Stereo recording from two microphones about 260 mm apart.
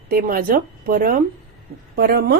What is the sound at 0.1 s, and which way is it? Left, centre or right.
Speech, right.